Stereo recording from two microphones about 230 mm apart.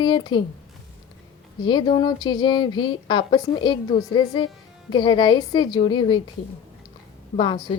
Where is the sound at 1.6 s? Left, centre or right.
Centre.